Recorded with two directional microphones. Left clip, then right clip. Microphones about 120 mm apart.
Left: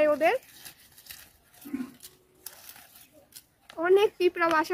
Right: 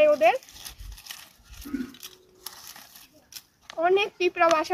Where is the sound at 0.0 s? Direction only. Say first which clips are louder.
Right 4 dB; 30° left (ahead or behind).